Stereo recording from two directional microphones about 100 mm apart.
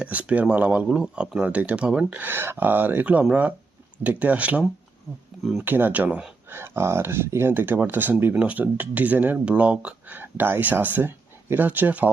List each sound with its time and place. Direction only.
0.0 s speech: 15° right (ahead or behind)
5.6 s speech: 20° right (ahead or behind)
6.5 s speech: 25° right (ahead or behind)